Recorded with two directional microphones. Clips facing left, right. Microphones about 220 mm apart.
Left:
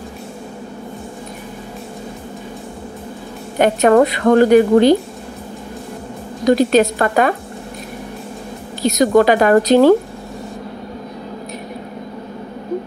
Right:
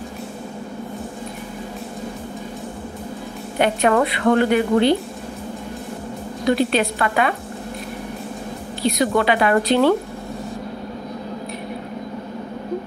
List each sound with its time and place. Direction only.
3.5 s a woman's voice: 45° left (ahead or behind)
6.4 s a woman's voice: 40° left (ahead or behind)
8.8 s a woman's voice: 45° left (ahead or behind)